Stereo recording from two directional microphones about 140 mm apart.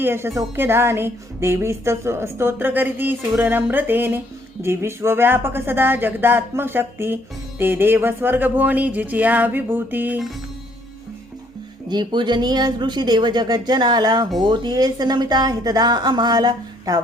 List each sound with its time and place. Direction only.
0.0 s a woman's voice: 15° right (ahead or behind)
11.9 s a woman's voice: 30° right (ahead or behind)